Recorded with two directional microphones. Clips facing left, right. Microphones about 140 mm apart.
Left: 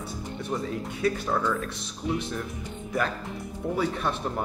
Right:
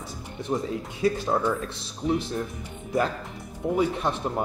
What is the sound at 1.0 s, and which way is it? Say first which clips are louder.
Speech: right 3 dB; 25° right (ahead or behind).